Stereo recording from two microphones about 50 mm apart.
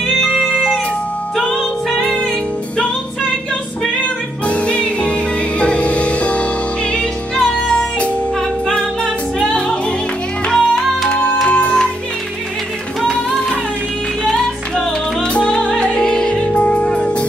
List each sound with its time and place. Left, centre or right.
0.0 s music: centre
0.4 s music: centre
4.5 s music: left
9.5 s music: centre
11.4 s music: left
14.3 s music: centre